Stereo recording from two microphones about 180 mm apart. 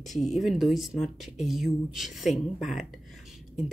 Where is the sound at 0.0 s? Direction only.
Centre (ahead or behind).